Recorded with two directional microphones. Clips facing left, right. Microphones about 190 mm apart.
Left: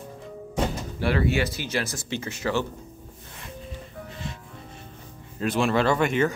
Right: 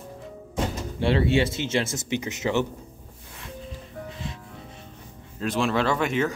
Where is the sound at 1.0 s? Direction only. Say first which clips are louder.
Right 2 dB; 25° right (ahead or behind).